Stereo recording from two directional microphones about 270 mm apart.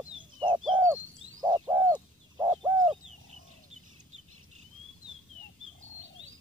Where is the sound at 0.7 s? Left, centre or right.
Centre.